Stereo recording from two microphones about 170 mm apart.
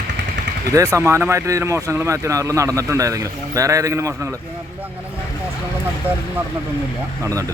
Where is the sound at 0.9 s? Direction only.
15° right (ahead or behind).